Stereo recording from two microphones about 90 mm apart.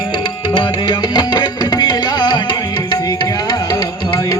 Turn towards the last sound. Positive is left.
turn(degrees=55)  # may be behind; listen again after turning